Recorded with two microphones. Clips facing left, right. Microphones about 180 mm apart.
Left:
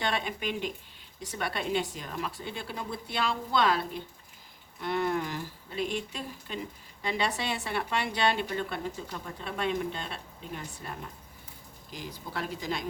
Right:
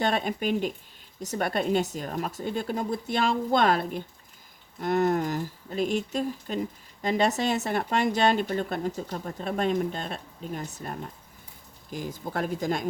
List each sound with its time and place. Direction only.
0.0 s speech: 45° right (ahead or behind)